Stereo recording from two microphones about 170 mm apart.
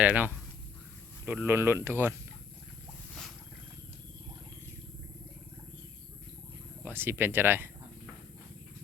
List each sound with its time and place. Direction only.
0.0 s speech: 10° right (ahead or behind)
6.8 s speech: 10° right (ahead or behind)